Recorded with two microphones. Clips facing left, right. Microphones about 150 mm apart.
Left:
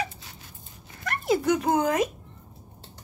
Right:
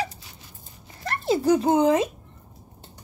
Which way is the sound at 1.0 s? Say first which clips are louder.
Right 3 dB; 30° right (ahead or behind).